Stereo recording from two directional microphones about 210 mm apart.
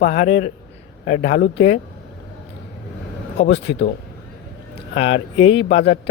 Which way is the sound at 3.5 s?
55° left (ahead or behind).